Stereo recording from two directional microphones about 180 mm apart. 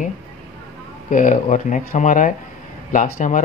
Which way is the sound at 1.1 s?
45° left (ahead or behind).